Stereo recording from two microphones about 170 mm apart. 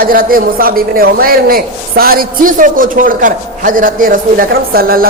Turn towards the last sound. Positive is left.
turn(degrees=-60)  # may be behind; listen again after turning